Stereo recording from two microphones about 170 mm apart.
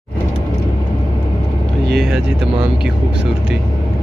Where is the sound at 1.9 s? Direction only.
Centre (ahead or behind).